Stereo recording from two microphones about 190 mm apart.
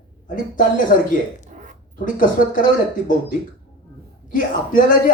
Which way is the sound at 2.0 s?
45° left (ahead or behind).